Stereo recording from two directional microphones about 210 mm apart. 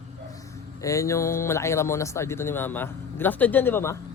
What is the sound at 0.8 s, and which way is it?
Speech, 15° left (ahead or behind).